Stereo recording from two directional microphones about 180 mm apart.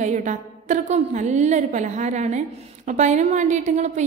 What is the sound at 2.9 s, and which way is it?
A woman's voice, 45° right (ahead or behind).